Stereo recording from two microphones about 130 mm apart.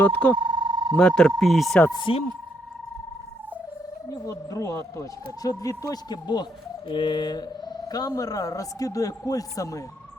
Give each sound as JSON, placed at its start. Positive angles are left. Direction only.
{"t": 0.0, "sound": "speech", "side_deg": 15}
{"t": 0.3, "sound": "a sound", "side_deg": -35}
{"t": 0.9, "sound": "speech", "side_deg": 5}
{"t": 1.9, "sound": "speech", "side_deg": 40}
{"t": 4.1, "sound": "speech", "side_deg": 25}